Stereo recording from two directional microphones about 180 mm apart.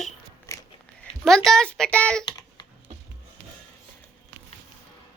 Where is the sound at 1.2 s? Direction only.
Centre (ahead or behind).